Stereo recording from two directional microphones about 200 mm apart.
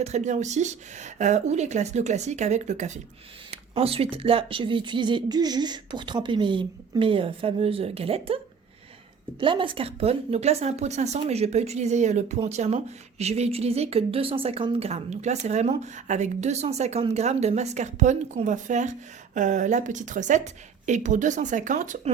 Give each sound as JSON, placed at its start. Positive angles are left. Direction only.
{"t": 0.0, "sound": "speech", "side_deg": -35}
{"t": 9.4, "sound": "speech", "side_deg": -25}